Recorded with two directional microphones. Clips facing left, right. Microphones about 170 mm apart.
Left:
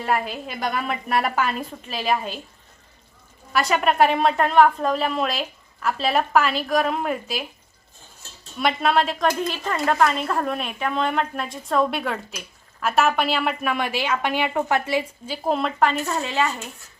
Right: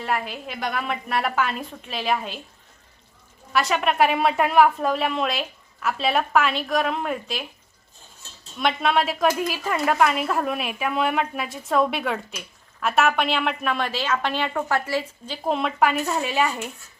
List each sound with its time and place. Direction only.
0.0 s a woman's voice: 45° left (ahead or behind)
0.9 s a woman's voice: centre (ahead or behind)
3.5 s a woman's voice: centre (ahead or behind)
8.5 s a woman's voice: centre (ahead or behind); by 15.0 s 20° left (ahead or behind)
15.3 s speech: centre (ahead or behind)